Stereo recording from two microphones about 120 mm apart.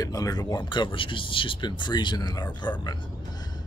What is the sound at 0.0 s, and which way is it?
Speech, 30° left (ahead or behind).